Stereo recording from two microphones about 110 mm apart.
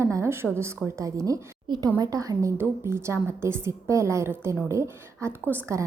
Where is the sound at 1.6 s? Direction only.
45° right (ahead or behind).